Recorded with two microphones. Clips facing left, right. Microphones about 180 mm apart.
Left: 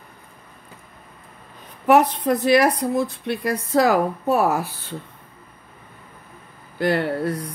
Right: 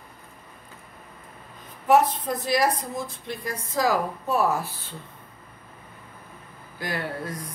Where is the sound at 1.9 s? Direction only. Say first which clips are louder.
Left 4 dB; 70° left (ahead or behind).